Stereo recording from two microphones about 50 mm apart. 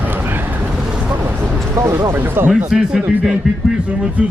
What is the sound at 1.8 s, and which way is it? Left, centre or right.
Speech, right.